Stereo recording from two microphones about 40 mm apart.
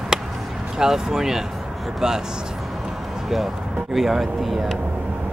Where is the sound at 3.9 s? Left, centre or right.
Centre.